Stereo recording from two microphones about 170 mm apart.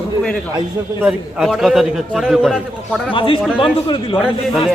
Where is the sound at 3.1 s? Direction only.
30° left (ahead or behind).